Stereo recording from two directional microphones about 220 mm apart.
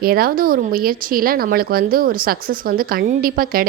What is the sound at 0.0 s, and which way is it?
Speech, 40° right (ahead or behind).